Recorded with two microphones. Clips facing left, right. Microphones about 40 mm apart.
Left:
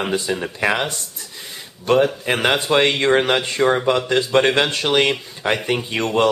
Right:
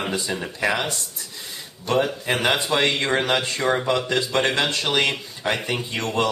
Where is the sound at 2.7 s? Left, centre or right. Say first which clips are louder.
Left 5 dB; left.